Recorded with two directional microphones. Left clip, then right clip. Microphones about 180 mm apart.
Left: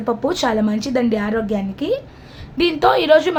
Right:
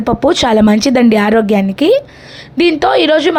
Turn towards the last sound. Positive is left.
turn(degrees=-35)  # may be behind; listen again after turning